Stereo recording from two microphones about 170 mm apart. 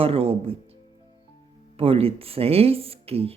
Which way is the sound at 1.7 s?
35° right (ahead or behind).